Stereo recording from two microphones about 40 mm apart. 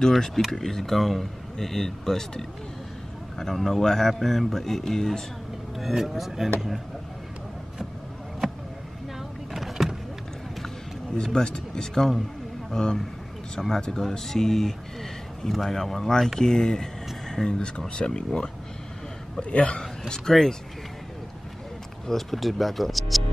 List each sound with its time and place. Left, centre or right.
0.0 s speech: centre
5.9 s speech: centre
9.5 s vehicle: centre
11.3 s speech: centre
17.5 s speech: left
19.8 s speech: centre
22.0 s speech: centre